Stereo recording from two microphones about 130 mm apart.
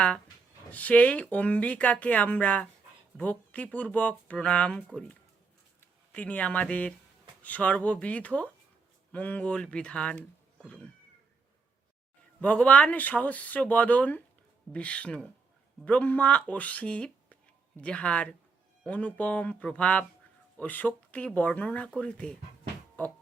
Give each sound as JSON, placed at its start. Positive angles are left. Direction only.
{"t": 0.7, "sound": "speech", "side_deg": 10}
{"t": 6.1, "sound": "speech", "side_deg": 10}
{"t": 12.4, "sound": "speech", "side_deg": 10}
{"t": 23.0, "sound": "music", "side_deg": 10}